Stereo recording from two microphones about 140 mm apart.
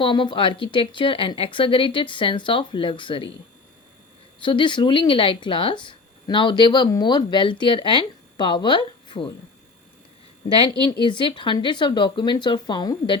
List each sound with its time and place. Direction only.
0.0 s speech: 35° left (ahead or behind)
4.4 s speech: 35° left (ahead or behind)
10.8 s speech: 35° left (ahead or behind)